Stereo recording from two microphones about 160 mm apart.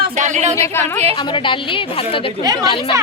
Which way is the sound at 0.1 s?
50° right (ahead or behind).